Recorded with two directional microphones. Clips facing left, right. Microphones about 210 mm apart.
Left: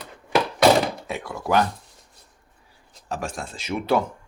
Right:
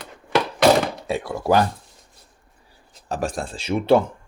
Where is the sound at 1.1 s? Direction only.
35° right (ahead or behind).